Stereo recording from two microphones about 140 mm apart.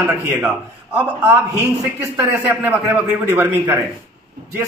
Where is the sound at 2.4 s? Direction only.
15° right (ahead or behind).